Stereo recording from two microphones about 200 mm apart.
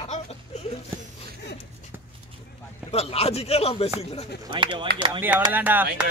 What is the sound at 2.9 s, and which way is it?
Speech, 30° left (ahead or behind).